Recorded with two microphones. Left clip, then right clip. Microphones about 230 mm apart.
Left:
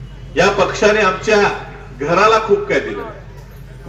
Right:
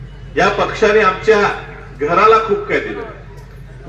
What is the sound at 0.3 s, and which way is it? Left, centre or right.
Speech, left.